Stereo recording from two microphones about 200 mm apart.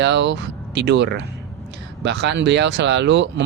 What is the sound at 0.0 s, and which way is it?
Speech, 60° right (ahead or behind).